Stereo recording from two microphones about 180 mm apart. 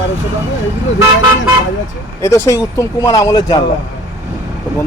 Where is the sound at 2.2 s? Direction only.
15° left (ahead or behind).